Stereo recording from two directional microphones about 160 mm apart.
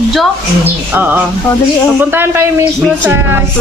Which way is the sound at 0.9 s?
10° right (ahead or behind).